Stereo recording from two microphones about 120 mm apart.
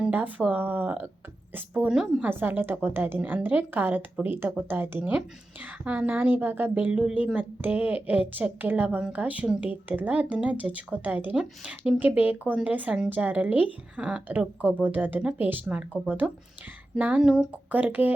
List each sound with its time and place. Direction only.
0.0 s a woman's voice: 15° right (ahead or behind)
1.9 s a woman's voice: 5° right (ahead or behind)
2.2 s a woman's voice: 15° right (ahead or behind)